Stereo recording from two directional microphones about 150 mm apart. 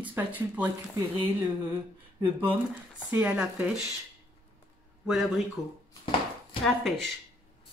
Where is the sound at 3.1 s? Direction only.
10° right (ahead or behind).